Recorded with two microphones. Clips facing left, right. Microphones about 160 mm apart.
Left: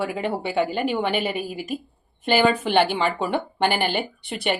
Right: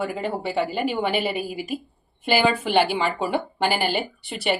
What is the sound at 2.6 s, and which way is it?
A woman's voice, 5° right (ahead or behind).